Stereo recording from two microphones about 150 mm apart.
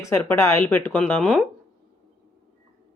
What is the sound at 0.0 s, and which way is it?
Speech, 20° left (ahead or behind).